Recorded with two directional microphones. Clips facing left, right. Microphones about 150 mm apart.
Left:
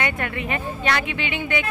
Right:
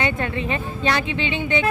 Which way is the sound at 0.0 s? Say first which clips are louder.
Right 3 dB; 25° right (ahead or behind).